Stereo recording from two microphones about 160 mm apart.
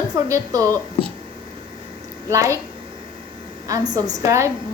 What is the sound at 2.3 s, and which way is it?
Speech, 20° right (ahead or behind).